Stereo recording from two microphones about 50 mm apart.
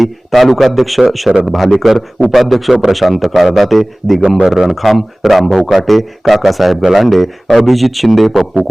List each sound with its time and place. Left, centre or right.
0.0 s a man's voice: centre
1.3 s a man's voice: centre
1.5 s a man's voice: centre